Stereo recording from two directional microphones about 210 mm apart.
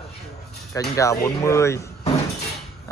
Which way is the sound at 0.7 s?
15° left (ahead or behind).